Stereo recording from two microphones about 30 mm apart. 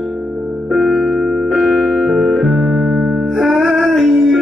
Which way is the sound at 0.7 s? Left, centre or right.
Centre.